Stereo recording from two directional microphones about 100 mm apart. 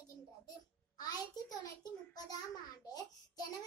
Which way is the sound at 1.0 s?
40° left (ahead or behind).